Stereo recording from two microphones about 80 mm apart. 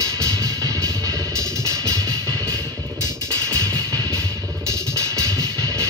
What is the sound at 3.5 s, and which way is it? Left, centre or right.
Music, right.